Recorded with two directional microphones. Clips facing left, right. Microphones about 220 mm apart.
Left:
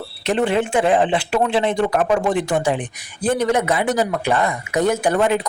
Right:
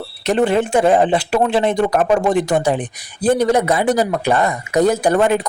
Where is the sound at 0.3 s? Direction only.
45° right (ahead or behind).